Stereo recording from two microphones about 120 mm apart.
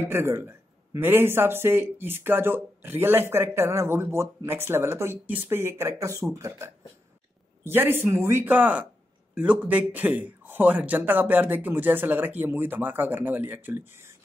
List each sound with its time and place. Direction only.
0.0 s a man's voice: 20° right (ahead or behind)